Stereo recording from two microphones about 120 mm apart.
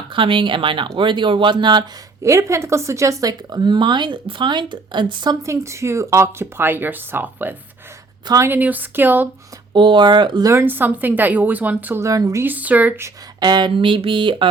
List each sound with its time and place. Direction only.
0.1 s speech: 45° right (ahead or behind)
2.2 s speech: 25° right (ahead or behind)
9.7 s speech: 40° right (ahead or behind)
10.5 s speech: 15° right (ahead or behind)
12.0 s speech: 25° right (ahead or behind)
12.5 s speech: 15° right (ahead or behind)
13.4 s speech: 40° right (ahead or behind)